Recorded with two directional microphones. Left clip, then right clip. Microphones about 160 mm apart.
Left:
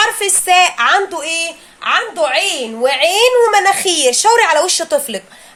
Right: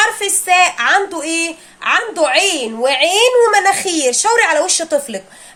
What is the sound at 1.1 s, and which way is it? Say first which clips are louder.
A woman's voice: even; 15° right (ahead or behind).